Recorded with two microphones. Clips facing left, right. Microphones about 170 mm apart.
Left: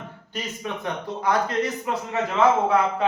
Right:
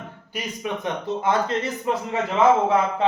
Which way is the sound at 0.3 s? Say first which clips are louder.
Right 2 dB; 20° right (ahead or behind).